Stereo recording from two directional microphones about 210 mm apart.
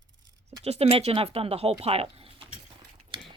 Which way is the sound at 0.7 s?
30° right (ahead or behind).